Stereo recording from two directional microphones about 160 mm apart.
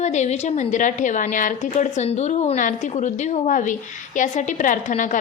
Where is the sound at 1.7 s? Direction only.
40° left (ahead or behind).